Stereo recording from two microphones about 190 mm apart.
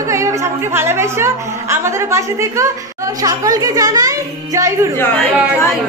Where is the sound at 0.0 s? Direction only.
15° right (ahead or behind).